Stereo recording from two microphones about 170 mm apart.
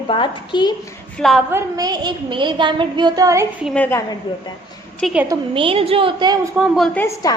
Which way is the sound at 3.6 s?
5° left (ahead or behind).